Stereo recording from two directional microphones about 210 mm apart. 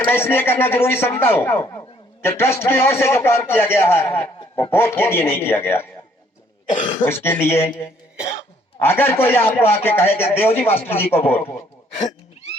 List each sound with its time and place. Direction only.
0.0 s a man's voice: 10° left (ahead or behind)
7.0 s a man's voice: 10° left (ahead or behind)
8.8 s a man's voice: 10° left (ahead or behind)
11.9 s throat clearing: 30° left (ahead or behind)